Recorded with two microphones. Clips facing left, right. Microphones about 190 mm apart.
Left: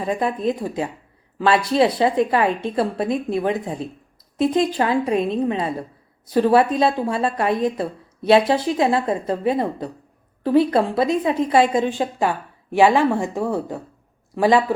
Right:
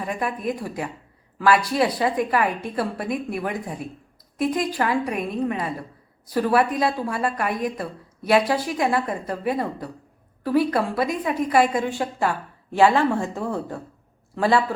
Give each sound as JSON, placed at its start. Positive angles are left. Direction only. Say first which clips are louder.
{"t": 0.0, "sound": "a woman's voice", "louder": "left 5 dB", "side_deg": 25}